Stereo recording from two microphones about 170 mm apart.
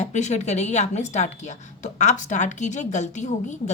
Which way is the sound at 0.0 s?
45° left (ahead or behind).